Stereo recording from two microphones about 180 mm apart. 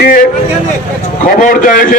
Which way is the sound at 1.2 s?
50° left (ahead or behind).